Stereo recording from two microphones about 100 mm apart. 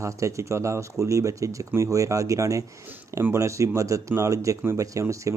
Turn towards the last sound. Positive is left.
turn(degrees=-30)  # may be behind; listen again after turning